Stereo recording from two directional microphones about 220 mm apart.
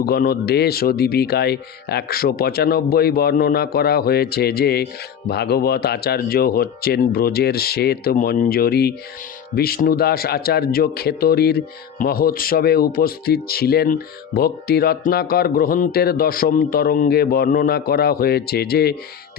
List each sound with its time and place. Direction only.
0.0 s a man's voice: 45° left (ahead or behind)